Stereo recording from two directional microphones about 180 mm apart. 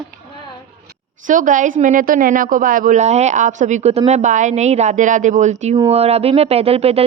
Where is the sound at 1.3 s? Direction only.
45° right (ahead or behind).